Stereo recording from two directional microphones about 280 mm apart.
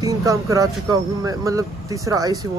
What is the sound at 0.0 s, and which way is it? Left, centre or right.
Speech, centre.